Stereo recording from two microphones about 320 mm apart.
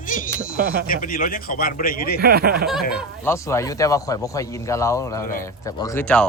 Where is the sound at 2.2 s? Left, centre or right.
Right.